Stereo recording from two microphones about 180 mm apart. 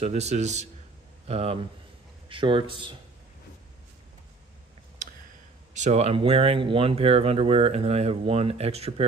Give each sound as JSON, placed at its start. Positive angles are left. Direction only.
{"t": 0.0, "sound": "a man's voice", "side_deg": -35}
{"t": 5.8, "sound": "speech", "side_deg": -35}